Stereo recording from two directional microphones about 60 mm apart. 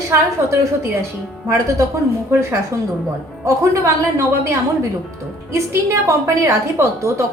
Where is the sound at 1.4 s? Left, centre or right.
Right.